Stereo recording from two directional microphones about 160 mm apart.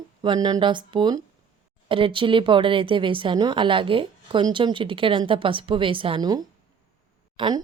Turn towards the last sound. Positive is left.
turn(degrees=-30)  # may be behind; listen again after turning